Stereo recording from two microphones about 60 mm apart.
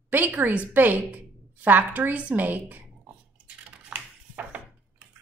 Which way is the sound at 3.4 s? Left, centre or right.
Centre.